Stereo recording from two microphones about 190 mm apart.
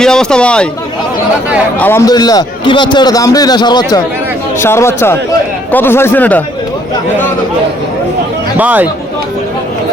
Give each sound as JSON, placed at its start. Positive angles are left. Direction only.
{"t": 0.0, "sound": "a man's voice", "side_deg": 5}
{"t": 1.8, "sound": "a man's voice", "side_deg": 15}
{"t": 8.5, "sound": "speech", "side_deg": -10}